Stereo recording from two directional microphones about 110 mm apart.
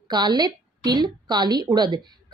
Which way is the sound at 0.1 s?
40° right (ahead or behind).